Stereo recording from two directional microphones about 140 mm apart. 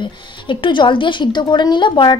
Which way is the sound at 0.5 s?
35° left (ahead or behind).